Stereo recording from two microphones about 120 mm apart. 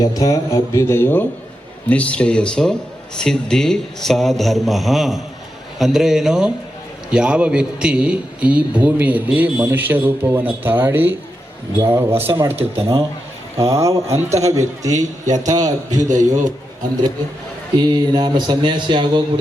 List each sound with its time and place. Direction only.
0.0 s a man's voice: 30° left (ahead or behind); by 12.5 s 20° right (ahead or behind)
12.5 s speech: 55° right (ahead or behind)
13.6 s a man's voice: 25° right (ahead or behind)
17.7 s speech: 40° right (ahead or behind)